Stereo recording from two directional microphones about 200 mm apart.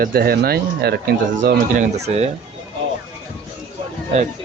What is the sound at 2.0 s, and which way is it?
Speech, 30° right (ahead or behind).